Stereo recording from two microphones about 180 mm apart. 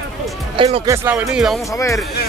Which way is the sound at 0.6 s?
30° right (ahead or behind).